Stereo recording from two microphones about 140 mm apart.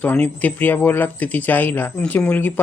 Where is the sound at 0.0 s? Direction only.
10° left (ahead or behind).